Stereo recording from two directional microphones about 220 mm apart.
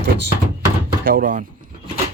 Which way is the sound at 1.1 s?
40° right (ahead or behind).